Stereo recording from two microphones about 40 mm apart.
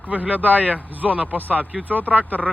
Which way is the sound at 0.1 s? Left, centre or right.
Right.